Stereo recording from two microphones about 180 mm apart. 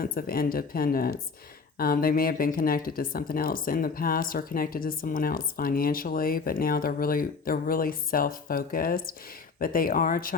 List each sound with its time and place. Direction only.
0.0 s speech: 55° left (ahead or behind)